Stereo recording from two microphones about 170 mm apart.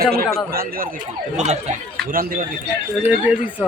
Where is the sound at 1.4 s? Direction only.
40° right (ahead or behind).